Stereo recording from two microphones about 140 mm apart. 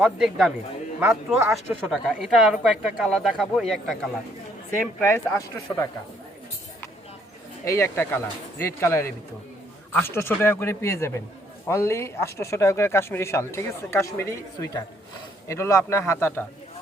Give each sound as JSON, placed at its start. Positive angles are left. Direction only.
{"t": 0.0, "sound": "speech", "side_deg": -5}
{"t": 5.0, "sound": "speech", "side_deg": 20}
{"t": 7.6, "sound": "speech", "side_deg": 20}